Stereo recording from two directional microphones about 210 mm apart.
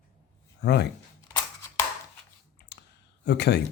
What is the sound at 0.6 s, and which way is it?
Speech, 50° left (ahead or behind).